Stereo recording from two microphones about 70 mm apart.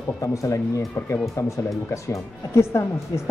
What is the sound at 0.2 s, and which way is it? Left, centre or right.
Speech, left.